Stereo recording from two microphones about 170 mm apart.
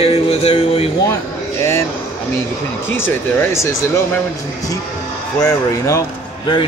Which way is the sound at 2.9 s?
15° left (ahead or behind).